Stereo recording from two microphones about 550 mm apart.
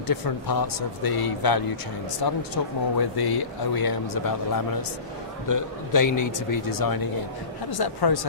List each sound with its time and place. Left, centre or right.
0.1 s a man's voice: left